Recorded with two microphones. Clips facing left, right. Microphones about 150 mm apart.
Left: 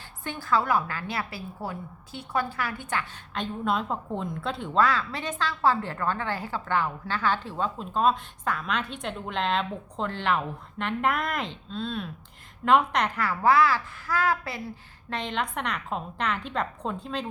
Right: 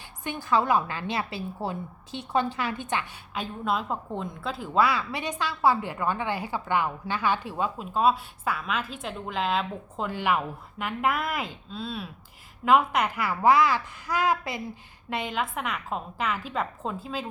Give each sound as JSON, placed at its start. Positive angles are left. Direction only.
{"t": 0.3, "sound": "a woman's voice", "side_deg": -20}